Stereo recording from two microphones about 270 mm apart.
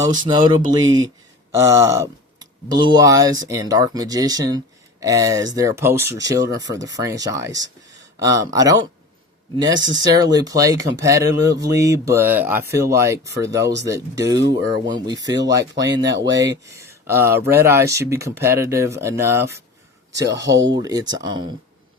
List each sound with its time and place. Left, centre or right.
0.0 s speech: centre